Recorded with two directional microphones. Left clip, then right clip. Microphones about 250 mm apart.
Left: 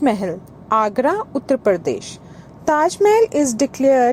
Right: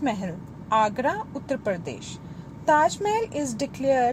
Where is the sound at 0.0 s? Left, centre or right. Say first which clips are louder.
Left 10 dB; left.